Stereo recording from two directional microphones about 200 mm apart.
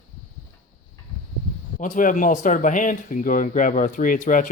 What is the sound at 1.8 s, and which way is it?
Speech, 40° left (ahead or behind).